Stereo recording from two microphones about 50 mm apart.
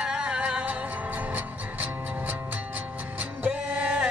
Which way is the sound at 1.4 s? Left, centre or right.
Right.